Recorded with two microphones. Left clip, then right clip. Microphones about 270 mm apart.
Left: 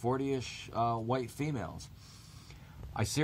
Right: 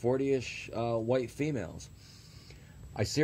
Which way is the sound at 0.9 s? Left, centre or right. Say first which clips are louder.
Right 4 dB; centre.